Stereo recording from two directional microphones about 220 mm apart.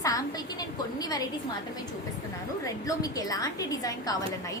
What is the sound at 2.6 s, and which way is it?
A woman's voice, 15° left (ahead or behind).